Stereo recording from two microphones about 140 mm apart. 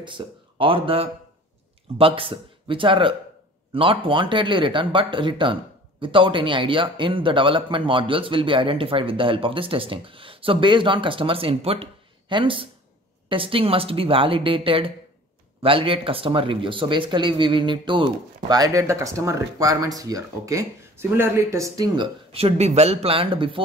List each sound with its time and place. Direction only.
0.0 s speech: 35° right (ahead or behind)